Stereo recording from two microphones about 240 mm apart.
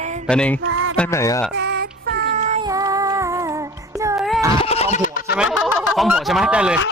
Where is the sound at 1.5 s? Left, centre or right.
Right.